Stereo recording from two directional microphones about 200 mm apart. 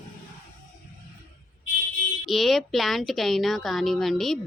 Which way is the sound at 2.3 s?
Centre (ahead or behind).